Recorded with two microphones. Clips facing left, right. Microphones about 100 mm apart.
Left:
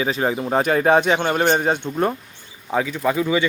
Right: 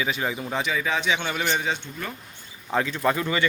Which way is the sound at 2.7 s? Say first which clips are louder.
Left 3 dB; 5° left (ahead or behind).